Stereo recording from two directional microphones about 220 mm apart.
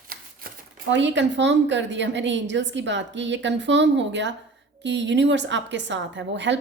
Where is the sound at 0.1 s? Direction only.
40° right (ahead or behind).